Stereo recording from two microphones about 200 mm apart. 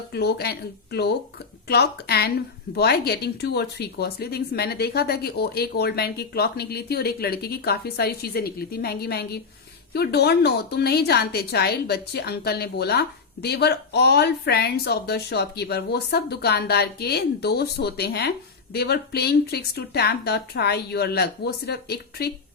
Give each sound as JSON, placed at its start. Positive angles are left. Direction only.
{"t": 0.1, "sound": "a woman's voice", "side_deg": 55}